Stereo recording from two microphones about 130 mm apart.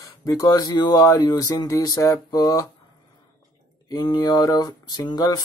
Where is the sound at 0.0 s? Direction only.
25° left (ahead or behind).